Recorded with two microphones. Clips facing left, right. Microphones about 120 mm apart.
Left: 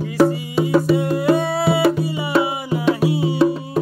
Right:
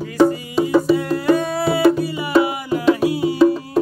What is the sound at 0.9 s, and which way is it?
Music, 20° left (ahead or behind).